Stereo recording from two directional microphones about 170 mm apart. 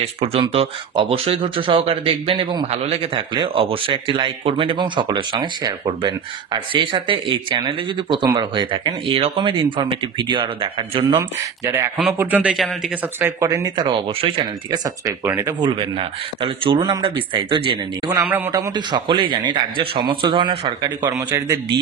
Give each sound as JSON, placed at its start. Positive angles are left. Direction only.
{"t": 0.0, "sound": "a man's voice", "side_deg": -35}
{"t": 11.1, "sound": "speech", "side_deg": -15}
{"t": 13.2, "sound": "a man's voice", "side_deg": -15}
{"t": 18.2, "sound": "speech", "side_deg": -10}
{"t": 18.5, "sound": "a man's voice", "side_deg": -25}